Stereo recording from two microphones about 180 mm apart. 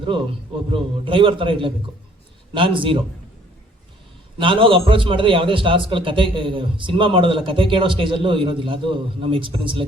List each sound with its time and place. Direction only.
0.7 s a man's voice: 30° right (ahead or behind)
4.4 s a man's voice: 30° right (ahead or behind)